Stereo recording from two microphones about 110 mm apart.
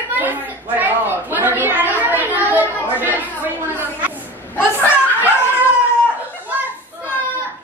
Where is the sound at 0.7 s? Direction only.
15° right (ahead or behind).